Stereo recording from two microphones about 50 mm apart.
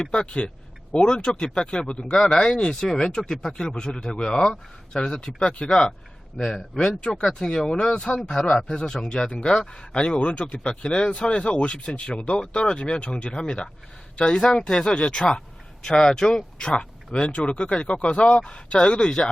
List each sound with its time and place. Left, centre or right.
0.0 s a man's voice: centre
13.3 s a man's voice: centre